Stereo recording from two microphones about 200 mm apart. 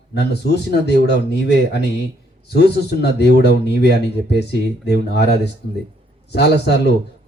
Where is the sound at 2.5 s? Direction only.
55° left (ahead or behind).